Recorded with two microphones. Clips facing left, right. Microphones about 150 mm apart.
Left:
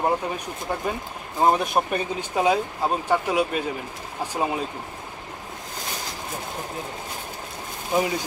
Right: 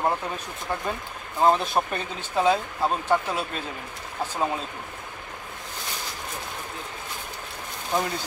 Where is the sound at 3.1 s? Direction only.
10° left (ahead or behind).